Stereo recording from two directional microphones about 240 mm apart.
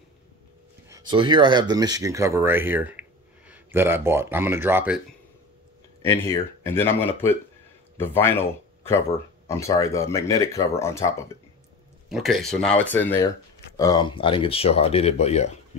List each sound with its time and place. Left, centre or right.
0.8 s speech: centre
6.0 s speech: centre
12.1 s speech: centre; by 15.5 s left